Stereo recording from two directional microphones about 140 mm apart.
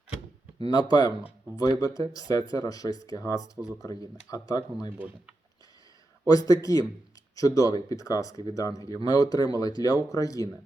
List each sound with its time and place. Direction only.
0.7 s speech: 30° left (ahead or behind)
4.9 s speech: 10° right (ahead or behind)
6.2 s speech: 25° left (ahead or behind)